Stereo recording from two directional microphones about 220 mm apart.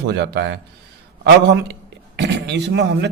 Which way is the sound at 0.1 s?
50° right (ahead or behind).